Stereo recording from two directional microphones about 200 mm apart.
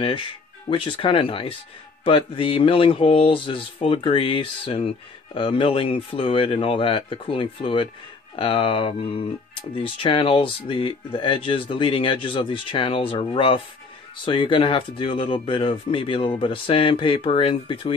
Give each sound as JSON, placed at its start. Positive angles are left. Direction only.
{"t": 0.0, "sound": "speech", "side_deg": 25}